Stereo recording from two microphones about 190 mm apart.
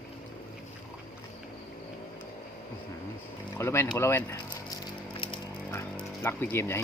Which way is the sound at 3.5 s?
15° left (ahead or behind).